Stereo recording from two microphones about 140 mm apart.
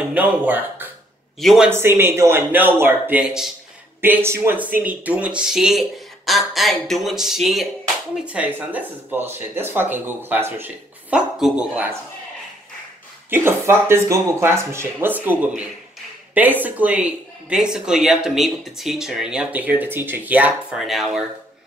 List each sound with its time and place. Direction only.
0.1 s speech: 15° right (ahead or behind)
1.4 s speech: centre (ahead or behind)
1.7 s speech: 15° right (ahead or behind)
13.3 s speech: 15° right (ahead or behind); by 21.2 s centre (ahead or behind)